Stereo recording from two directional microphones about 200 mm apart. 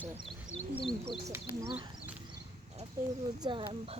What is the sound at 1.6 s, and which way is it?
Speech, 25° right (ahead or behind).